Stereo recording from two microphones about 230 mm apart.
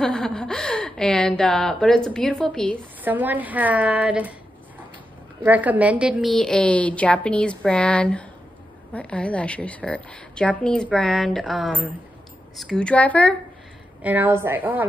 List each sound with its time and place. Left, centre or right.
0.0 s speech: centre
3.0 s a woman's voice: centre
5.4 s a woman's voice: centre
14.0 s a woman's voice: centre